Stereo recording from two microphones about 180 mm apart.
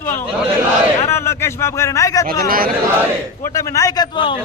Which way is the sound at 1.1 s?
15° left (ahead or behind).